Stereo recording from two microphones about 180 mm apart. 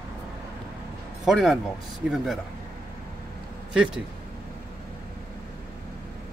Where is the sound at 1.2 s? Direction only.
Centre (ahead or behind).